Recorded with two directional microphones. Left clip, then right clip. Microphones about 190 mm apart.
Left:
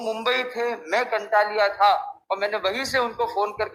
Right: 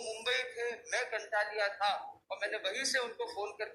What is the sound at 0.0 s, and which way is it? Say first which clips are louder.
A man's voice: left 11 dB; 50° left (ahead or behind).